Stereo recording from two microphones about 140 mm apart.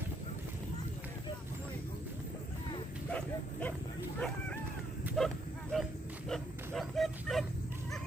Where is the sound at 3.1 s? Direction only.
10° left (ahead or behind).